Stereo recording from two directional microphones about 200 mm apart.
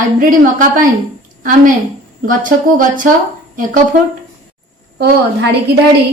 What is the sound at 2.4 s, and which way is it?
Speech, 40° right (ahead or behind).